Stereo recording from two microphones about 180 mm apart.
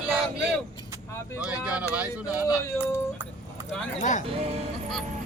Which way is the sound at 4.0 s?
45° left (ahead or behind).